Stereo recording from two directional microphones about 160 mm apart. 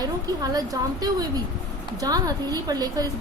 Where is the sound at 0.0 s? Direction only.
25° right (ahead or behind).